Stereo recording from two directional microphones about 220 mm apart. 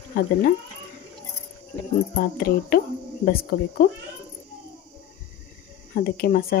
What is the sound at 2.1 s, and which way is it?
Speech, 45° left (ahead or behind).